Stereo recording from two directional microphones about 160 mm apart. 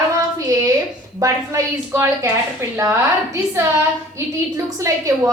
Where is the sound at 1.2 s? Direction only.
15° right (ahead or behind).